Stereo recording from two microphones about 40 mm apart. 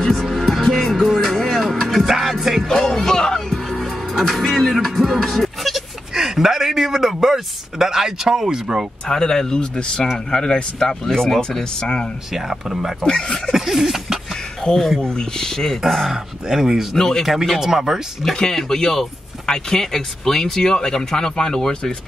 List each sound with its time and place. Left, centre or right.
0.0 s music: centre
2.0 s music: centre
2.7 s music: centre
9.0 s speech: centre
12.3 s speech: centre
13.0 s speech: centre
13.5 s a sound: centre
14.6 s speech: centre
15.8 s speech: centre
16.4 s speech: centre
16.9 s speech: centre
17.6 s speech: centre
18.3 s speech: centre